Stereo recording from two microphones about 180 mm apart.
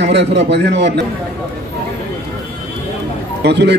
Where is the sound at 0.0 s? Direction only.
70° right (ahead or behind).